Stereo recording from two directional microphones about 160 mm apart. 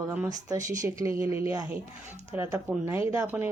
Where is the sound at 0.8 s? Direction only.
20° right (ahead or behind).